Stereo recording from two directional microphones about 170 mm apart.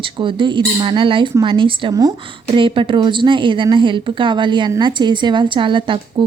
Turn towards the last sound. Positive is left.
turn(degrees=-30)  # may be behind; listen again after turning